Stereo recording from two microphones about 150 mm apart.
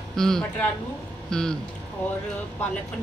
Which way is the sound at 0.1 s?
5° left (ahead or behind).